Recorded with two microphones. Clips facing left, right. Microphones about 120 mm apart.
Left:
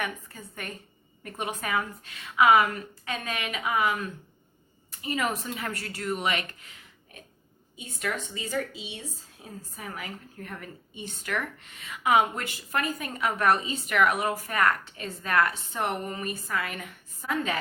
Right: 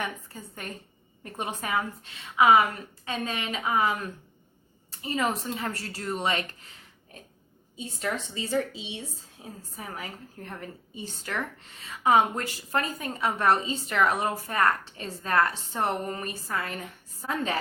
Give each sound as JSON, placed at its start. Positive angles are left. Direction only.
{"t": 1.2, "sound": "a woman's voice", "side_deg": -30}
{"t": 7.8, "sound": "a woman's voice", "side_deg": -30}